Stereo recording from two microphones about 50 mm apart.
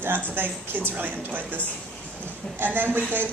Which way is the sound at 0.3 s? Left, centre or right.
Right.